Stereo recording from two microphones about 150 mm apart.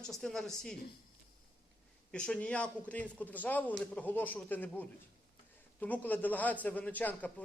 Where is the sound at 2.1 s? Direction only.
5° left (ahead or behind).